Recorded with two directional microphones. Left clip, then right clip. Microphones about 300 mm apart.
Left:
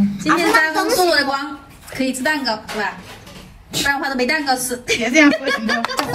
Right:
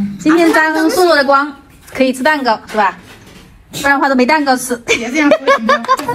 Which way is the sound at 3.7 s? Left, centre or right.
Centre.